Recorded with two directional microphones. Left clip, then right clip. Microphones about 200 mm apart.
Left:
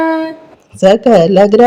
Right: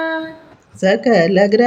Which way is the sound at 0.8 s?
30° left (ahead or behind).